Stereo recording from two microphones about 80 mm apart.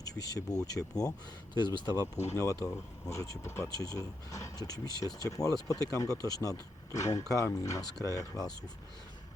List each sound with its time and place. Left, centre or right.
0.0 s speech: left
1.5 s speech: left
2.3 s speech: left
3.7 s speech: left